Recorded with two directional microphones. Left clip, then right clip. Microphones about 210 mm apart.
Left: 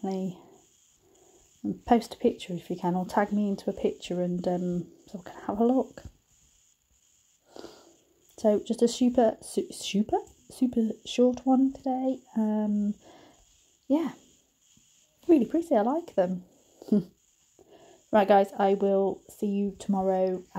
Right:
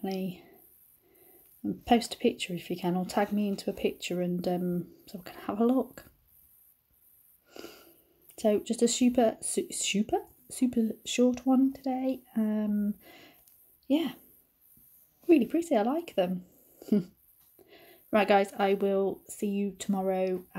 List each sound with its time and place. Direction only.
0.0 s speech: 15° left (ahead or behind)
1.6 s speech: 15° left (ahead or behind)
7.4 s wheeze: 15° left (ahead or behind)
8.4 s speech: 15° left (ahead or behind)
15.2 s speech: 15° left (ahead or behind)
16.8 s wheeze: 15° left (ahead or behind)
17.6 s speech: 15° left (ahead or behind)